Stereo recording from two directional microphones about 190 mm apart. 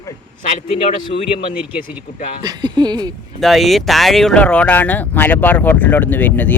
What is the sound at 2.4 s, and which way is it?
Speech, 20° right (ahead or behind).